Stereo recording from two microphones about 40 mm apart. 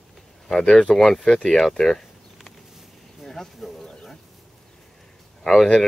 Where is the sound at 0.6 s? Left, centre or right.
Left.